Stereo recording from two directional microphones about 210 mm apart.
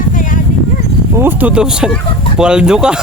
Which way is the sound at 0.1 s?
40° left (ahead or behind).